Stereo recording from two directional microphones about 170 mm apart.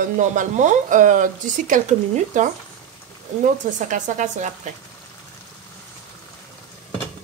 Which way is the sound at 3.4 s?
45° right (ahead or behind).